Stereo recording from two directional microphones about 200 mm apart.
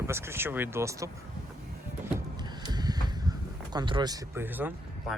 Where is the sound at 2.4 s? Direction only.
20° right (ahead or behind).